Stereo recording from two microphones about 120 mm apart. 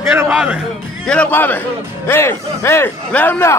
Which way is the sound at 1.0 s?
10° left (ahead or behind).